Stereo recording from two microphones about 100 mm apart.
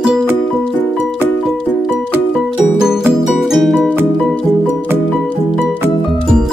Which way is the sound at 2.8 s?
5° right (ahead or behind).